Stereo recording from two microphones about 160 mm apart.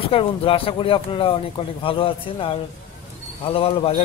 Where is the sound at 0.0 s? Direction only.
35° left (ahead or behind).